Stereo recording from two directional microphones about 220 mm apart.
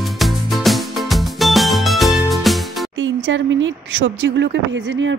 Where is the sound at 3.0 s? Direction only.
55° right (ahead or behind).